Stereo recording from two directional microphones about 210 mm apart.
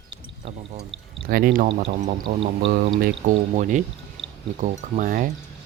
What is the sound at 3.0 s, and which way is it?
Speech, 35° right (ahead or behind).